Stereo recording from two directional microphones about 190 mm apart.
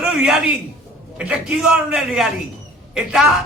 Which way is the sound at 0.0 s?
Centre (ahead or behind).